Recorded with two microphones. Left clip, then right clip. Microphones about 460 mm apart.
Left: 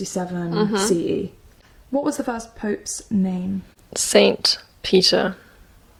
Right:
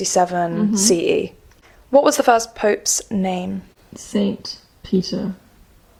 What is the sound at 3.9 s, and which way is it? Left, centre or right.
Speech, left.